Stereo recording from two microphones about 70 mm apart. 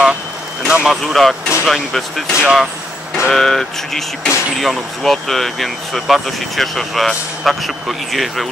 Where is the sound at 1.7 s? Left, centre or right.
Centre.